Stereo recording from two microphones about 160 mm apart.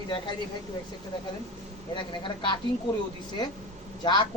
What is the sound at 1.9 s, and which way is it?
Speech, 30° left (ahead or behind).